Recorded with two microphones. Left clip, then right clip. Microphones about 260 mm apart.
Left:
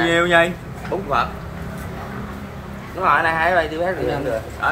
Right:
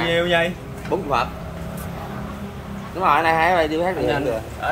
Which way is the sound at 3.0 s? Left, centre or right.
Right.